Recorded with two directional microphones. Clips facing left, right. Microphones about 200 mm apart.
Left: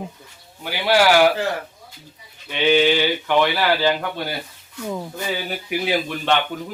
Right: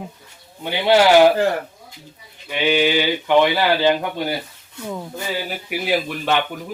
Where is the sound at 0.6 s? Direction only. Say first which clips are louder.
Right 3 dB; 20° right (ahead or behind).